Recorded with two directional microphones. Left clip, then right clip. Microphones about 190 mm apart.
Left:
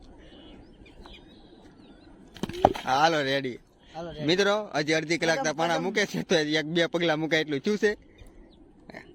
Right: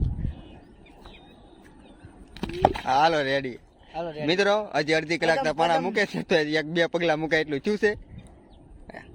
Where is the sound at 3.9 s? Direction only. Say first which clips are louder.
Right 6 dB; 55° right (ahead or behind).